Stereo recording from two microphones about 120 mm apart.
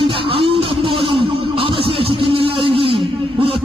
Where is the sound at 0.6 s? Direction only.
50° right (ahead or behind).